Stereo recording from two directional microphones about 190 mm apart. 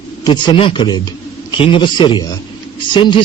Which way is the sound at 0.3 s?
25° left (ahead or behind).